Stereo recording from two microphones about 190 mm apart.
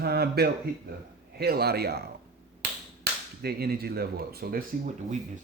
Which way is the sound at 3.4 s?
55° right (ahead or behind).